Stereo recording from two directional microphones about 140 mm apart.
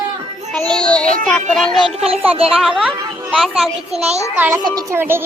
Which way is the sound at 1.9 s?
45° right (ahead or behind).